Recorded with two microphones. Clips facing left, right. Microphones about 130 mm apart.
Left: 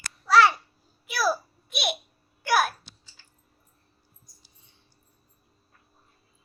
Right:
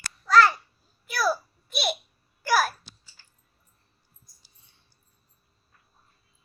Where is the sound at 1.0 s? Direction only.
Centre (ahead or behind).